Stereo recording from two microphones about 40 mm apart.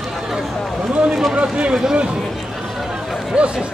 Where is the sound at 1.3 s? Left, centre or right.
Right.